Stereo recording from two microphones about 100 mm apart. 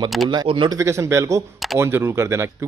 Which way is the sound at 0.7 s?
30° right (ahead or behind).